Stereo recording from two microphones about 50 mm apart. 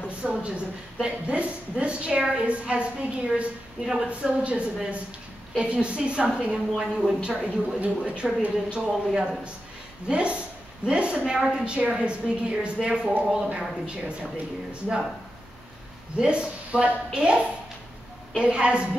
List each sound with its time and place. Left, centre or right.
0.2 s a woman's voice: right
3.8 s speech: centre
4.1 s a woman's voice: right
6.7 s speech: centre
7.2 s a woman's voice: right
16.2 s a woman's voice: centre
18.4 s a woman's voice: right